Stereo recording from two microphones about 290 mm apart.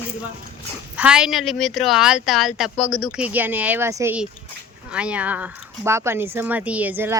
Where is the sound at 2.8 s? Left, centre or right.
Left.